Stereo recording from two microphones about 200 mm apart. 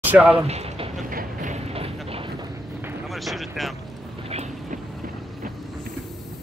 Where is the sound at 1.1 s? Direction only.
40° right (ahead or behind).